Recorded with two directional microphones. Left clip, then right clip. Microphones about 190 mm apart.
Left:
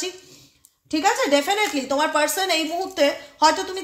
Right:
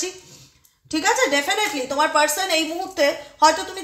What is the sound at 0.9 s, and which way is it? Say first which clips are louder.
A woman's voice: even; 35° left (ahead or behind).